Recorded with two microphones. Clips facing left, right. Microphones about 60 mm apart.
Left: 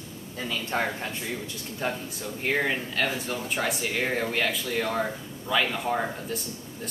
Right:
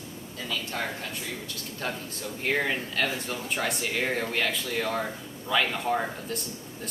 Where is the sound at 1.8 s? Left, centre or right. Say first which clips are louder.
Left 3 dB; centre.